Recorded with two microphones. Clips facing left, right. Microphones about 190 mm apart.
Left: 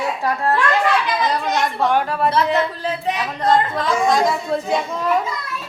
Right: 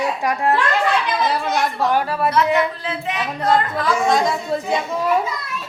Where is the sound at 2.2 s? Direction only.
35° left (ahead or behind).